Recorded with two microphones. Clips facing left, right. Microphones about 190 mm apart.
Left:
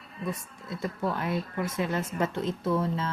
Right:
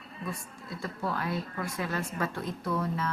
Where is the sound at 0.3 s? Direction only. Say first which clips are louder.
Left 4 dB; 20° left (ahead or behind).